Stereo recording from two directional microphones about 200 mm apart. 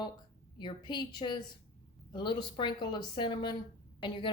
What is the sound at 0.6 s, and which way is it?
A woman's voice, 20° left (ahead or behind).